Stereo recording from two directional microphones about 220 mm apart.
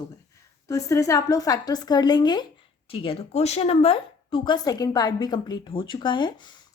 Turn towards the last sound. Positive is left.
turn(degrees=20)  # may be behind; listen again after turning